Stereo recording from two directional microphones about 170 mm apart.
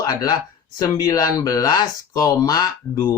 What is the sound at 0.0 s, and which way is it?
Speech, 25° left (ahead or behind).